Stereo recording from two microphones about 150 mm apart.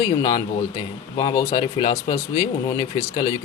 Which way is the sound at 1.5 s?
35° left (ahead or behind).